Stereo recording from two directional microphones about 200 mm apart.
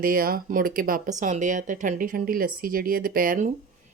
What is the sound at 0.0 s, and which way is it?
Speech, 45° right (ahead or behind).